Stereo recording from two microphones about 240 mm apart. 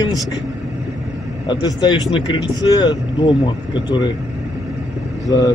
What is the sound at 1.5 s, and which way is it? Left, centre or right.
Speech, centre.